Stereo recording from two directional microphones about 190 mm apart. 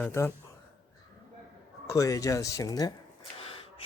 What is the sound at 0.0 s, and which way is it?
Speech, 10° left (ahead or behind).